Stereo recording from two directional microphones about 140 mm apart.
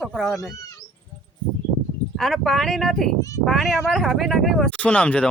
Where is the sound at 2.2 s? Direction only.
5° left (ahead or behind).